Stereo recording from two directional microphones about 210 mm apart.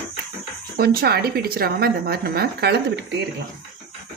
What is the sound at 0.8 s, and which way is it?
A woman's voice, 45° right (ahead or behind).